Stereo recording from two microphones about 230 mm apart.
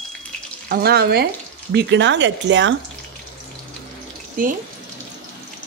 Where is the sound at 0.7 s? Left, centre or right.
Right.